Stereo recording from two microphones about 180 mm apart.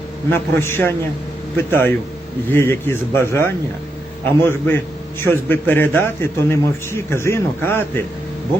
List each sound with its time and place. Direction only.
0.3 s a man's voice: 10° left (ahead or behind)